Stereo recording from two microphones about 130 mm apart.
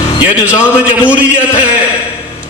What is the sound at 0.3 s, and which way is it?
Speech, 10° right (ahead or behind).